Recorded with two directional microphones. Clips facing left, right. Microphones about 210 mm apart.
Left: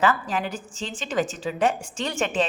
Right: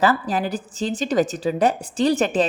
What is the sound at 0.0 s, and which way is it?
A woman's voice, 35° right (ahead or behind).